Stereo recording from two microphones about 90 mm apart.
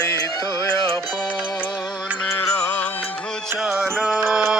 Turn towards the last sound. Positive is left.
turn(degrees=-5)  # may be behind; listen again after turning